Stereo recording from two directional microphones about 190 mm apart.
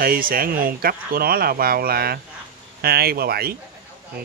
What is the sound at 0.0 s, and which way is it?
Speech, 50° right (ahead or behind).